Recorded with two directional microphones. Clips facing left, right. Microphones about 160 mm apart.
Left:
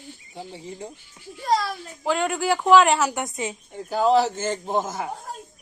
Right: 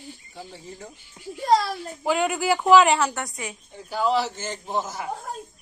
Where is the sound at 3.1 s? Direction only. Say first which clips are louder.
Left 4 dB; 20° left (ahead or behind).